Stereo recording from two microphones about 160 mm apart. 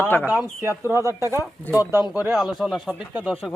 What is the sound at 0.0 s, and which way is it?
Speech, 10° left (ahead or behind).